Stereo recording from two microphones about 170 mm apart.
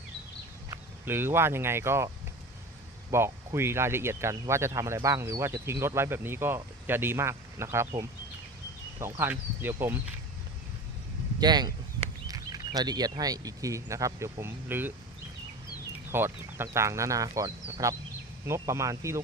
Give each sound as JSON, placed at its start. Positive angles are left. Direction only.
{"t": 0.7, "sound": "speech", "side_deg": -15}
{"t": 3.1, "sound": "speech", "side_deg": -15}
{"t": 11.3, "sound": "speech", "side_deg": -25}
{"t": 16.1, "sound": "speech", "side_deg": -15}